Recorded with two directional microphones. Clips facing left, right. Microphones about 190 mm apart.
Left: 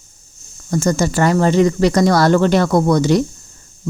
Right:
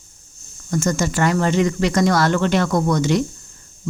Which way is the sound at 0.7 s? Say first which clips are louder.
Left 4 dB; 35° left (ahead or behind).